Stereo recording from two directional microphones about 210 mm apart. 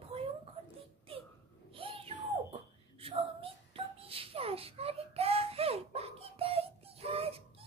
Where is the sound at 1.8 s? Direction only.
25° right (ahead or behind).